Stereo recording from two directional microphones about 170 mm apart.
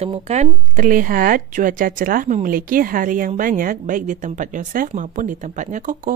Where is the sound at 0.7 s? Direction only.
55° right (ahead or behind).